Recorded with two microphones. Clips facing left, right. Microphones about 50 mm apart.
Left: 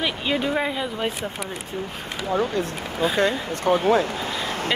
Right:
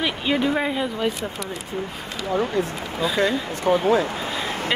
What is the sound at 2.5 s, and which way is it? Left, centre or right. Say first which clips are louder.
Speech: right 1 dB; left.